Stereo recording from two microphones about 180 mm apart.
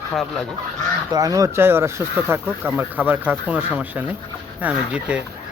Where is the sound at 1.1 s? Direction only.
20° right (ahead or behind).